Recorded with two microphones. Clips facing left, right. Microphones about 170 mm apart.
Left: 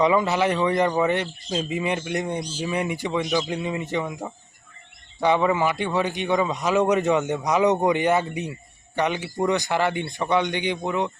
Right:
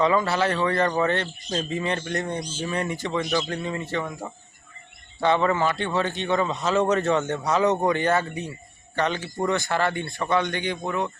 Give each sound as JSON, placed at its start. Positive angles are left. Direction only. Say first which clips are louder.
{"t": 0.0, "sound": "a man's voice", "louder": "left 2 dB", "side_deg": 15}